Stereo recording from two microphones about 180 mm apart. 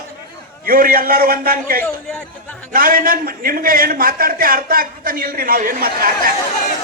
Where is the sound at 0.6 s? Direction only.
55° right (ahead or behind).